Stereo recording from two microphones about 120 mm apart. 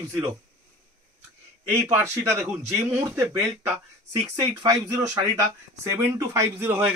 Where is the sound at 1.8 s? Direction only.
25° right (ahead or behind).